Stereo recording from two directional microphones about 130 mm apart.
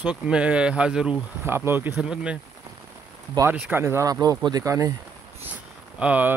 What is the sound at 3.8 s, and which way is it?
Speech, 25° right (ahead or behind).